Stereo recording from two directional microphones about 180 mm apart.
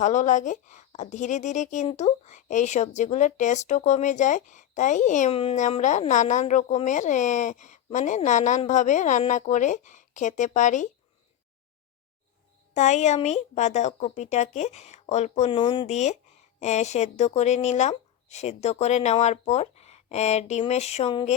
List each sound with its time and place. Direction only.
0.0 s a woman's voice: 45° left (ahead or behind)
12.7 s a woman's voice: 40° left (ahead or behind)
15.9 s a woman's voice: 40° left (ahead or behind)